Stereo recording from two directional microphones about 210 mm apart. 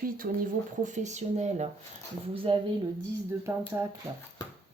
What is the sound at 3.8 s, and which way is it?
Speech, 15° right (ahead or behind).